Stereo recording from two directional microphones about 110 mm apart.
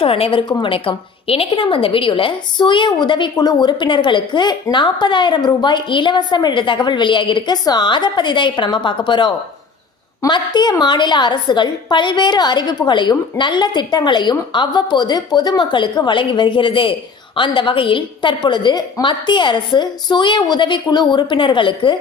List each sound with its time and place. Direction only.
0.0 s a woman's voice: 60° left (ahead or behind)